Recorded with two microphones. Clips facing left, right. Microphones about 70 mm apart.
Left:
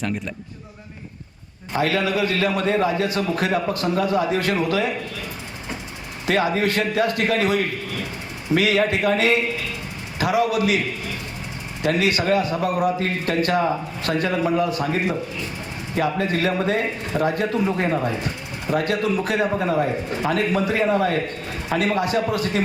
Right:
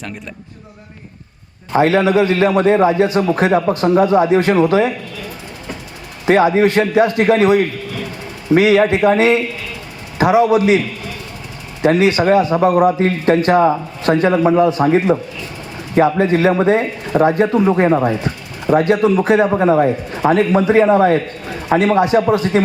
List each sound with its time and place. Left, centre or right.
1.7 s speech: right
6.2 s speech: right
11.8 s speech: right